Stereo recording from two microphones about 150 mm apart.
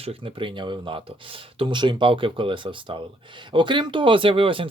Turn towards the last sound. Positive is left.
turn(degrees=-35)  # may be behind; listen again after turning